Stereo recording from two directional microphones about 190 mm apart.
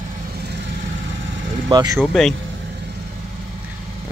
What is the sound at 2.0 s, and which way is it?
Speech, centre (ahead or behind).